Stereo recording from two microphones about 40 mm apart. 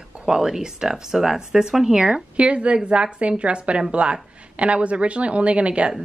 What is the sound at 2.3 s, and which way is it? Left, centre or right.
Speech, right.